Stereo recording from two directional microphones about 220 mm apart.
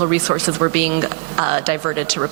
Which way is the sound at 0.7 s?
15° right (ahead or behind).